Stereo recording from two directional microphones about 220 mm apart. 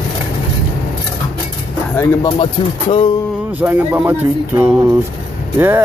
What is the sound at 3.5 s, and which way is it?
Speech, 10° right (ahead or behind).